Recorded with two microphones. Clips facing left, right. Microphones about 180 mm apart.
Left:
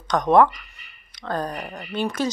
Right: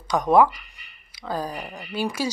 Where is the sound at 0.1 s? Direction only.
5° right (ahead or behind).